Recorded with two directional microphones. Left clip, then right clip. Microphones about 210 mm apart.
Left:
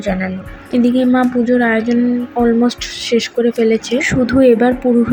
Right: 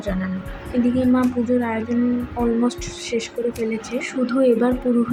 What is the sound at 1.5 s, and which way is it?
Speech, 15° left (ahead or behind).